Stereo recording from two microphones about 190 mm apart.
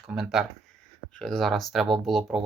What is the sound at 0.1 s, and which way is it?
Speech, 5° right (ahead or behind).